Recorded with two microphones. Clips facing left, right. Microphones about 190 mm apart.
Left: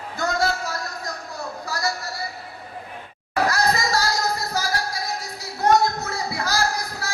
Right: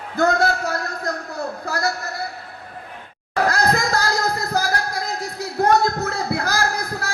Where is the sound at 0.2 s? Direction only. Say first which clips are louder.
Right 5 dB; 60° right (ahead or behind).